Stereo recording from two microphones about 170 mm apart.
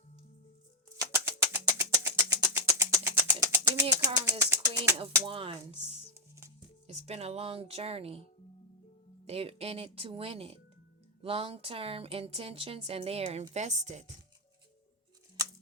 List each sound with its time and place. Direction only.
0.9 s bird: 15° right (ahead or behind)
1.8 s a sound: 15° right (ahead or behind)
5.1 s a woman's voice: 30° right (ahead or behind)
6.8 s a woman's voice: 40° right (ahead or behind)
9.2 s a woman's voice: 35° right (ahead or behind)